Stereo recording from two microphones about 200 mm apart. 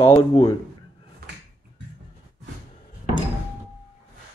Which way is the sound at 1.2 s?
50° right (ahead or behind).